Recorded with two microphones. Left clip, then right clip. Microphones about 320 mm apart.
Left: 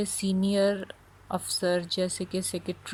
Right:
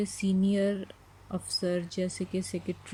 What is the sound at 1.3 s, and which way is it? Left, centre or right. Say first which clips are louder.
Speech: left 4 dB; centre.